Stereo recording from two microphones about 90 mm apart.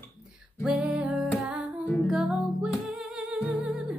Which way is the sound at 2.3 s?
15° right (ahead or behind).